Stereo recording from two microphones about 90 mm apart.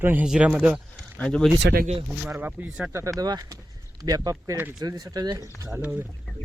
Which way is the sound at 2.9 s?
40° right (ahead or behind).